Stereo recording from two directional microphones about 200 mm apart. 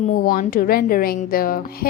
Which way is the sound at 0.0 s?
40° left (ahead or behind).